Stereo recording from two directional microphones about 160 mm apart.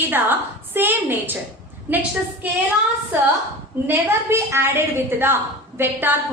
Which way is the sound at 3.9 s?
15° right (ahead or behind).